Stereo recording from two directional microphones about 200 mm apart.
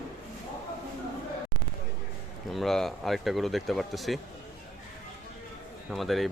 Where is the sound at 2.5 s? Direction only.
Centre (ahead or behind).